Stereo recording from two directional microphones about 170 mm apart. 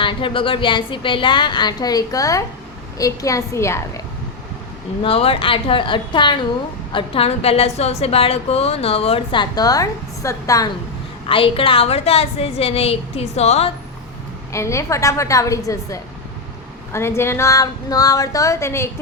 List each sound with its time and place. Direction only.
0.0 s a woman's voice: 30° left (ahead or behind)
5.0 s a woman's voice: 35° left (ahead or behind)
11.3 s a woman's voice: 30° left (ahead or behind)
14.5 s a woman's voice: 15° left (ahead or behind)